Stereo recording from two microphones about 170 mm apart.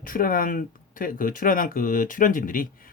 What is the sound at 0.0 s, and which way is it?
Speech, 55° left (ahead or behind).